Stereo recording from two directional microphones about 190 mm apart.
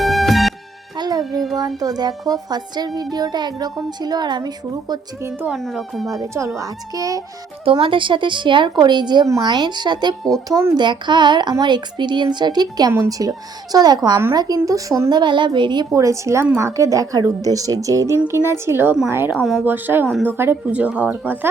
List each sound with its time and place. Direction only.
0.0 s music: centre (ahead or behind)
0.9 s music: 20° right (ahead or behind)
1.8 s speech: 20° right (ahead or behind)
5.3 s speech: 5° right (ahead or behind)
6.1 s speech: 15° right (ahead or behind)